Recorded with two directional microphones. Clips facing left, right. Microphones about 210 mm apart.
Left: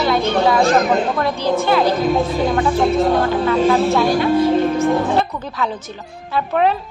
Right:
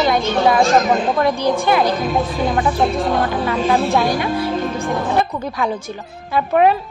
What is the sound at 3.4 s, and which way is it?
Speech, 15° right (ahead or behind).